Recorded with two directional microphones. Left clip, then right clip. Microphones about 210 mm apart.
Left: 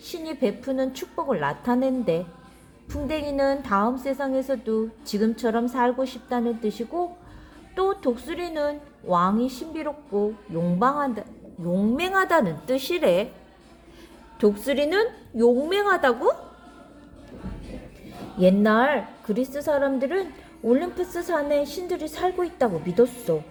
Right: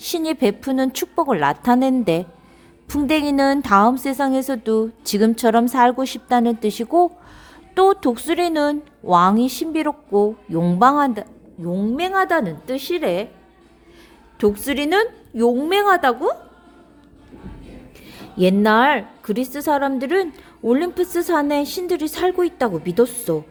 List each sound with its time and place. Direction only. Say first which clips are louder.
0.0 s a woman's voice: right 7 dB; 45° right (ahead or behind)
11.6 s a woman's voice: right 3 dB; 25° right (ahead or behind)
14.3 s a woman's voice: right 2 dB; 35° right (ahead or behind)
18.0 s a woman's voice: right 2 dB; 40° right (ahead or behind)